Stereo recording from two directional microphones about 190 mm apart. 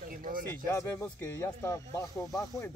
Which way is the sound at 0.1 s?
50° right (ahead or behind).